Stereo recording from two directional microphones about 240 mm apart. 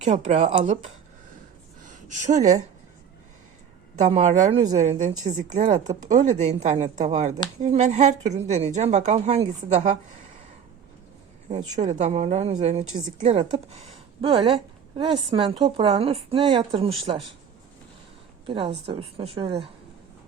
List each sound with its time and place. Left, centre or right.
0.0 s speech: right
1.8 s speech: right
4.0 s a woman's voice: right
5.7 s speech: centre
6.1 s speech: right
11.8 s a woman's voice: right
18.4 s speech: right